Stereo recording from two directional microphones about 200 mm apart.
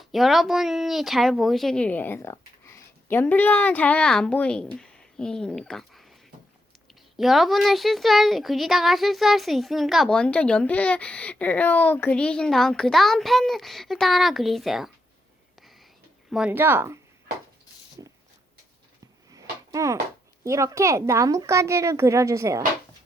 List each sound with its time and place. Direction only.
0.0 s speech: centre (ahead or behind)
7.2 s a woman's voice: centre (ahead or behind)
16.3 s a woman's voice: 5° right (ahead or behind)
19.3 s a sound: 15° right (ahead or behind)
20.4 s a woman's voice: 15° right (ahead or behind)